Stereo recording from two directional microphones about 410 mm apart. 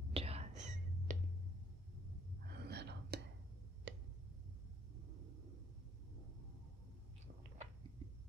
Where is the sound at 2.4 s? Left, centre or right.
Right.